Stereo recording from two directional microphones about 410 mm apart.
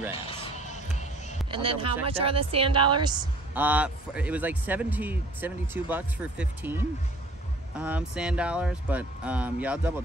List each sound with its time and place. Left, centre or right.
0.6 s music: centre
1.5 s speech: centre